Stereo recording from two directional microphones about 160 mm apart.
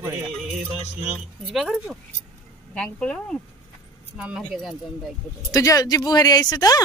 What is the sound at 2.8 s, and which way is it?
Speech, 5° left (ahead or behind).